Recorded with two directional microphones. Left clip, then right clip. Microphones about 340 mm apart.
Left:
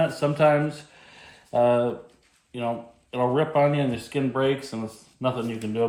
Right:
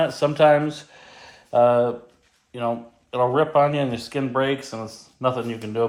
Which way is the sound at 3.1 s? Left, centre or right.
Right.